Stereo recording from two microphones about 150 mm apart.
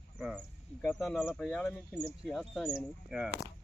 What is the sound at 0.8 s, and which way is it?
Speech, centre (ahead or behind).